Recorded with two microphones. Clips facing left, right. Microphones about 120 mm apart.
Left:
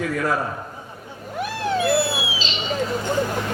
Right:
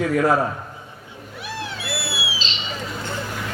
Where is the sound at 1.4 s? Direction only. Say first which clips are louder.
Left 9 dB; 45° left (ahead or behind).